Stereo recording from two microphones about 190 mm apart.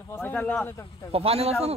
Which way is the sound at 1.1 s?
30° right (ahead or behind).